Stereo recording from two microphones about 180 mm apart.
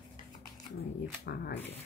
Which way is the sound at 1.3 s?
60° left (ahead or behind).